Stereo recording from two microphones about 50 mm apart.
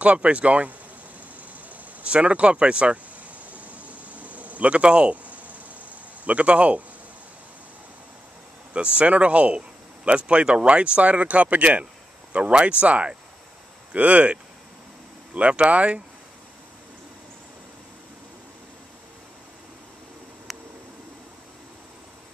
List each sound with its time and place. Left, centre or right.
0.0 s speech: right
2.0 s speech: right
3.5 s a sound: right
6.2 s speech: right
8.9 s speech: right
20.5 s a sound: centre